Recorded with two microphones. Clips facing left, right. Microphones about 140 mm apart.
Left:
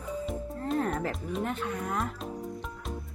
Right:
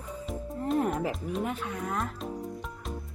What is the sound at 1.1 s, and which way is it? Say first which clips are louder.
Speech: right 1 dB; 5° right (ahead or behind).